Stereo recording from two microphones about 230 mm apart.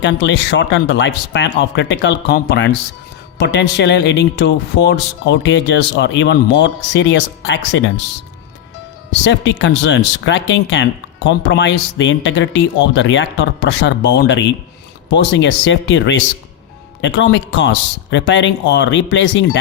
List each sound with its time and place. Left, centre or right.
0.0 s speech: left
9.2 s speech: left